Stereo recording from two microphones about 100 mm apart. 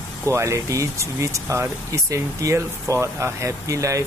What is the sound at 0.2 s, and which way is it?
Speech, 30° right (ahead or behind).